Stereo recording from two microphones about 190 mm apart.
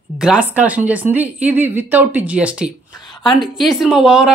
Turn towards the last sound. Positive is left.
turn(degrees=-5)  # may be behind; listen again after turning